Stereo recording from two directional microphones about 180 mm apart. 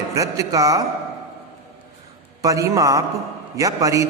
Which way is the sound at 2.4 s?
20° right (ahead or behind).